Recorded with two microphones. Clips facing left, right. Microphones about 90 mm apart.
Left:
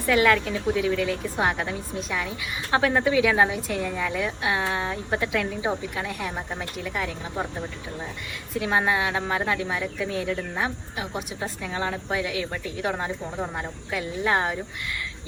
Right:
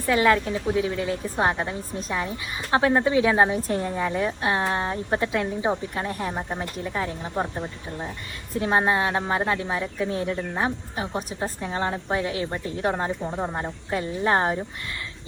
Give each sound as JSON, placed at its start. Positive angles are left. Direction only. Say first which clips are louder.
{"t": 0.1, "sound": "a woman's voice", "louder": "even", "side_deg": -25}
{"t": 7.5, "sound": "speech", "louder": "right 1 dB", "side_deg": -15}
{"t": 8.5, "sound": "speech", "louder": "right 2 dB", "side_deg": -35}
{"t": 13.1, "sound": "speech", "louder": "right 3 dB", "side_deg": -10}
{"t": 13.6, "sound": "speech", "louder": "right 3 dB", "side_deg": -35}